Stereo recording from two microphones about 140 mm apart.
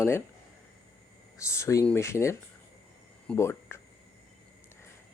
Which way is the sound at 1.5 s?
20° left (ahead or behind).